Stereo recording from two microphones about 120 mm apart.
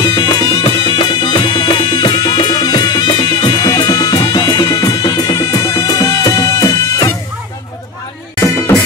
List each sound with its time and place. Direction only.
0.0 s music: 35° left (ahead or behind)
8.4 s music: 20° left (ahead or behind)